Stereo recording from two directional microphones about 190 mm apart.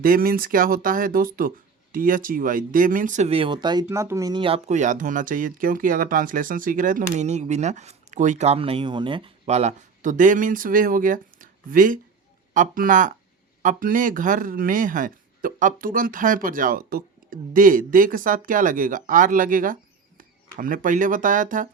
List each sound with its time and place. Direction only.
0.0 s speech: 50° right (ahead or behind)